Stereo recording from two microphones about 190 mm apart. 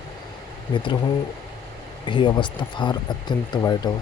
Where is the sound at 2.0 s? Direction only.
25° left (ahead or behind).